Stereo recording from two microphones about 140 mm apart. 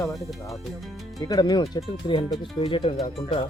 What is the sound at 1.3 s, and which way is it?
Speech, 30° left (ahead or behind).